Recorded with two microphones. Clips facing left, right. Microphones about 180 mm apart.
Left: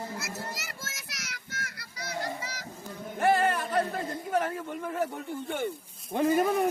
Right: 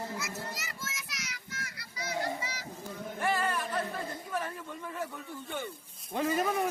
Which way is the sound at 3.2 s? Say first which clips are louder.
Left 7 dB; 55° left (ahead or behind).